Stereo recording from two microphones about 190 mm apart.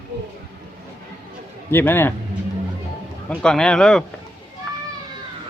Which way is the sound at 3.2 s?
5° left (ahead or behind).